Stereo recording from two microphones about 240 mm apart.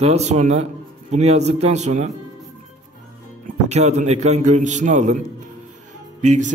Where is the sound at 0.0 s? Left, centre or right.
Right.